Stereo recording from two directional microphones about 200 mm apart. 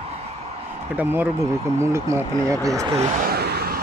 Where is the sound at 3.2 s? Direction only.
50° right (ahead or behind).